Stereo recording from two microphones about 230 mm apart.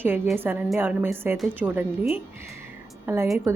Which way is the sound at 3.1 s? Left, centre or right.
Centre.